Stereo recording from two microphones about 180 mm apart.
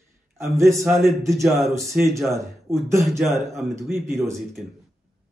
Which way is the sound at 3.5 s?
Centre (ahead or behind).